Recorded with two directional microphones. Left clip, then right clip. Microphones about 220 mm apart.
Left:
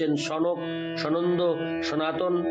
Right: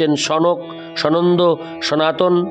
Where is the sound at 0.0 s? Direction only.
50° right (ahead or behind).